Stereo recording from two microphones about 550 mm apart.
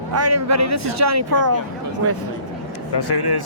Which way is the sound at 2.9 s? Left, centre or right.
Left.